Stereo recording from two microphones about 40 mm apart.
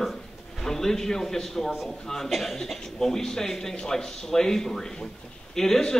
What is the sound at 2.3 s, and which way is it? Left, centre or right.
A man's voice, centre.